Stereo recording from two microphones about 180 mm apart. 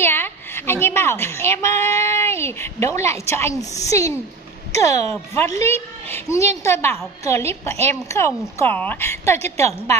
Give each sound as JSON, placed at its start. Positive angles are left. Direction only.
{"t": 0.0, "sound": "a child's voice", "side_deg": 10}